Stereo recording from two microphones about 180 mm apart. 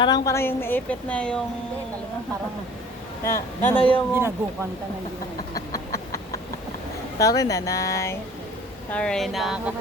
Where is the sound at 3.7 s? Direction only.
30° left (ahead or behind).